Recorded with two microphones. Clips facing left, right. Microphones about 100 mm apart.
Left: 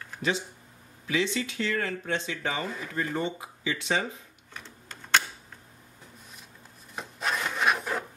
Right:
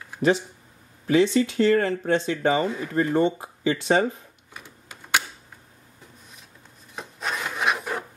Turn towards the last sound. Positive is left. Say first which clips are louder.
# right 1 dB
turn(degrees=-5)  # may be behind; listen again after turning